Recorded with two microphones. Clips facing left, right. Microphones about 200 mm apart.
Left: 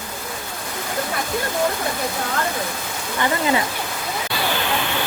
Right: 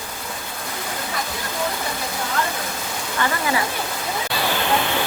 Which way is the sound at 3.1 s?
25° left (ahead or behind).